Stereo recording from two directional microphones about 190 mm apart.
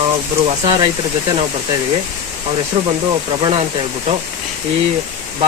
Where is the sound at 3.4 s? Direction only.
25° right (ahead or behind).